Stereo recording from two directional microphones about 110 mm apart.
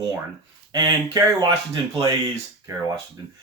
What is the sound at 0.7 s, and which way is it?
Speech, 35° right (ahead or behind).